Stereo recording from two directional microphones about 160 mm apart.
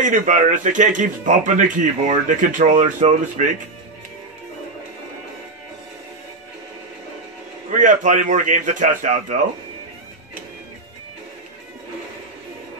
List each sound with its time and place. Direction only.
0.0 s speech: 55° right (ahead or behind)
7.7 s speech: 50° right (ahead or behind)